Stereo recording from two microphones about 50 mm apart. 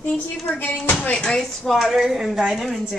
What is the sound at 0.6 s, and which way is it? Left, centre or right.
Speech, left.